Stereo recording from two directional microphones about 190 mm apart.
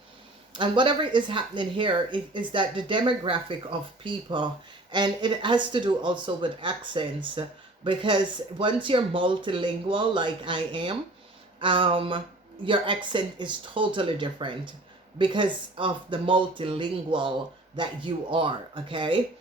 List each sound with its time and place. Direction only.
0.5 s speech: 25° right (ahead or behind)